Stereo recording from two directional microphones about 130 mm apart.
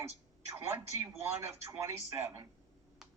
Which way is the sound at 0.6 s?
20° right (ahead or behind).